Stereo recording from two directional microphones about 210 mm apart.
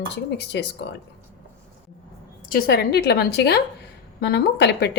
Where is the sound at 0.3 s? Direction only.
55° left (ahead or behind).